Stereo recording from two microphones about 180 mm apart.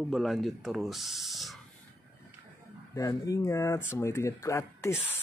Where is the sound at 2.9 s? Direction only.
20° left (ahead or behind).